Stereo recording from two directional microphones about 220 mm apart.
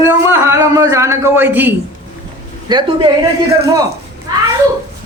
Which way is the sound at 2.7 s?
20° right (ahead or behind).